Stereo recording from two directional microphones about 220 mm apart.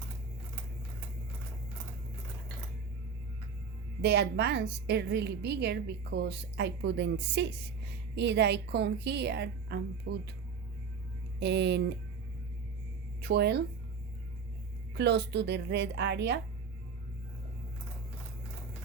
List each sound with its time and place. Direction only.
4.0 s a woman's voice: 50° right (ahead or behind)
11.3 s a woman's voice: 50° right (ahead or behind)
13.2 s a woman's voice: 45° right (ahead or behind)
14.9 s a woman's voice: 50° right (ahead or behind)